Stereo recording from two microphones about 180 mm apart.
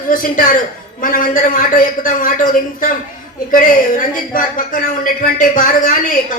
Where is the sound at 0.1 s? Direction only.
50° left (ahead or behind).